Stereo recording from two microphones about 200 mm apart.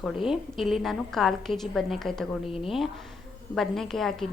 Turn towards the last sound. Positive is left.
turn(degrees=0)  # may be behind; listen again after turning